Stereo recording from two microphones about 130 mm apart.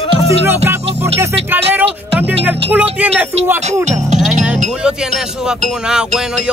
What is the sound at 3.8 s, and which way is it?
Music, 65° right (ahead or behind).